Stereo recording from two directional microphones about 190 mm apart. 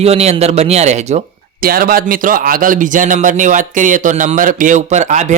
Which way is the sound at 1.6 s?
50° right (ahead or behind).